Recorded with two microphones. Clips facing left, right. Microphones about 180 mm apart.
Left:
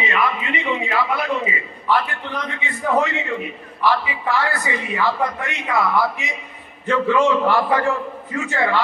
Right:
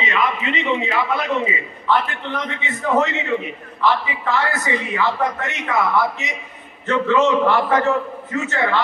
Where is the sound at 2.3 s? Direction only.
20° right (ahead or behind).